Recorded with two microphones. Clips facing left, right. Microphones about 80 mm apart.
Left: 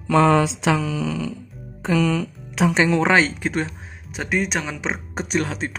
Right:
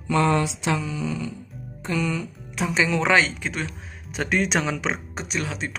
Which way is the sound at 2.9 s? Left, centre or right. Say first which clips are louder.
Left 3 dB; left.